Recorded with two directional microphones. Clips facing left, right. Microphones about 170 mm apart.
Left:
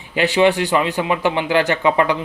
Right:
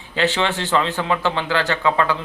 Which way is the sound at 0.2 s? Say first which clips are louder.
Left 6 dB; 15° left (ahead or behind).